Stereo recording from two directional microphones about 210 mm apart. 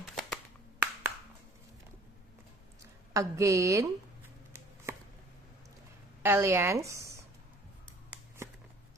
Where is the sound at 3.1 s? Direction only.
15° right (ahead or behind).